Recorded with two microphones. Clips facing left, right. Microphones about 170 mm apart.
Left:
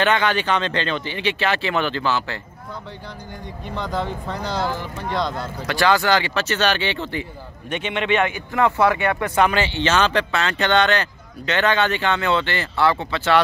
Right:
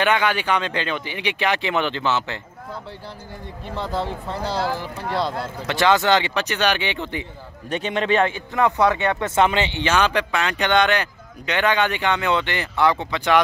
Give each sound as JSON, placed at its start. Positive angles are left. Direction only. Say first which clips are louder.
{"t": 0.0, "sound": "speech", "louder": "left 1 dB", "side_deg": -10}
{"t": 3.7, "sound": "speech", "louder": "even", "side_deg": -5}
{"t": 4.0, "sound": "a man's voice", "louder": "even", "side_deg": -30}
{"t": 5.7, "sound": "speech", "louder": "right 1 dB", "side_deg": -20}
{"t": 7.7, "sound": "a man's voice", "louder": "right 1 dB", "side_deg": -35}
{"t": 8.5, "sound": "speech", "louder": "left 1 dB", "side_deg": -20}